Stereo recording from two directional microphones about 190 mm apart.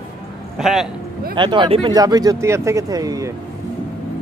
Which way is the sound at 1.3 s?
25° right (ahead or behind).